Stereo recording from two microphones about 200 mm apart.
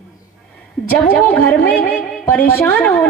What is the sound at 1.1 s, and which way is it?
A woman's voice, 5° left (ahead or behind).